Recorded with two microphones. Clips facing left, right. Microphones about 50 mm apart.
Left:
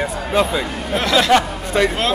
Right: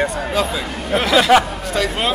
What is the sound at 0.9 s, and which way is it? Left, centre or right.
Speech, centre.